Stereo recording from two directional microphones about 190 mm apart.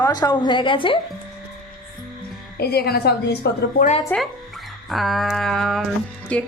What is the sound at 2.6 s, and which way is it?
Speech, 55° left (ahead or behind).